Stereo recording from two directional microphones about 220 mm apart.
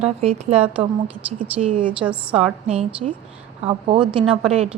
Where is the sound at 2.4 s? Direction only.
30° right (ahead or behind).